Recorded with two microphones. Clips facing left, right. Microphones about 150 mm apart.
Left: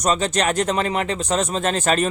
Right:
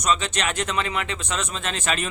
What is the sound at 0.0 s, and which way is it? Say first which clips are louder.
Speech: left 4 dB; 40° left (ahead or behind).